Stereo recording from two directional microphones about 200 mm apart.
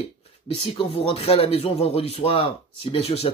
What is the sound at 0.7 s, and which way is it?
Speech, 25° left (ahead or behind).